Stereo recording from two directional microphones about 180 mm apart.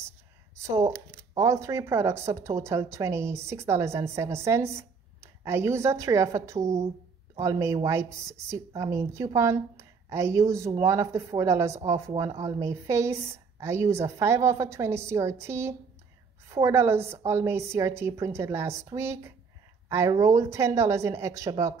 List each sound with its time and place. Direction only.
0.6 s a woman's voice: 15° right (ahead or behind)